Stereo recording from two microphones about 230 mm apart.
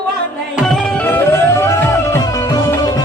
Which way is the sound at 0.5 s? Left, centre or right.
Centre.